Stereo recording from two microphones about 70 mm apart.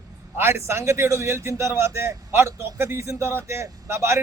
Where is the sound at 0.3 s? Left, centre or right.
Right.